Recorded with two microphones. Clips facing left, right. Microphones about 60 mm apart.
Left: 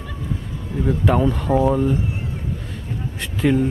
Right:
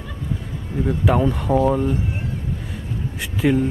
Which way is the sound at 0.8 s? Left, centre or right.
Centre.